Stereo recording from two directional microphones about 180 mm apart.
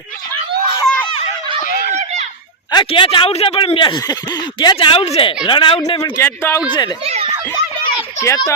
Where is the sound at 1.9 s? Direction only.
40° right (ahead or behind).